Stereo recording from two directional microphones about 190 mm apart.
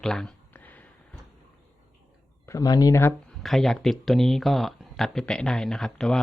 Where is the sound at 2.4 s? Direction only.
15° left (ahead or behind).